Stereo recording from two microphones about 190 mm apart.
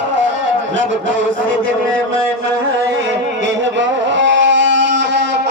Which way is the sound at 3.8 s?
70° right (ahead or behind).